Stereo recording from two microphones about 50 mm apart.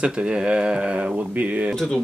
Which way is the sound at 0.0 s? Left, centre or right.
Centre.